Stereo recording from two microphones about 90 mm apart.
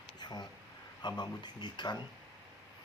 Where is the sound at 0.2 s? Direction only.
50° left (ahead or behind).